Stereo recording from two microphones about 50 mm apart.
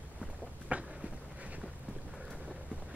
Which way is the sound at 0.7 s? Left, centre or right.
Right.